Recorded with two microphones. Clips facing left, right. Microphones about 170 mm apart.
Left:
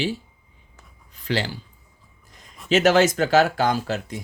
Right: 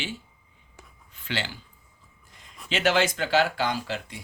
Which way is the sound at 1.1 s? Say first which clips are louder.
Left 7 dB; 40° left (ahead or behind).